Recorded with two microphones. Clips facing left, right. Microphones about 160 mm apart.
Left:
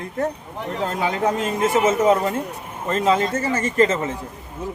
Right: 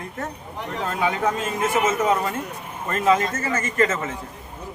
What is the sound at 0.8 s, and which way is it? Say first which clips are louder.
Speech: left 1 dB; 35° left (ahead or behind).